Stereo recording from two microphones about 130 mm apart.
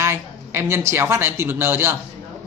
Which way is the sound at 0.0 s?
20° right (ahead or behind).